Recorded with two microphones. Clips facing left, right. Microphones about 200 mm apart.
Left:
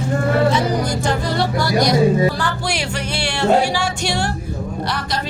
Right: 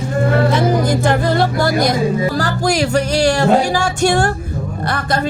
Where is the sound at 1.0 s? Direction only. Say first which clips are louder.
Right 5 dB; 55° right (ahead or behind).